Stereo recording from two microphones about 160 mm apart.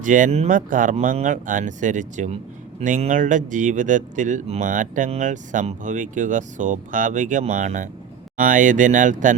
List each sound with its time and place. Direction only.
0.0 s speech: 55° right (ahead or behind)